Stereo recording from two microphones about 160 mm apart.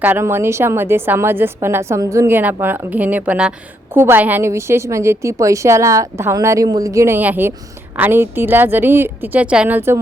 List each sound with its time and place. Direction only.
0.0 s a woman's voice: 15° right (ahead or behind)